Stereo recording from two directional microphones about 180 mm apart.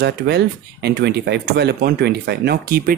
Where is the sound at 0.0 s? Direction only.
65° right (ahead or behind).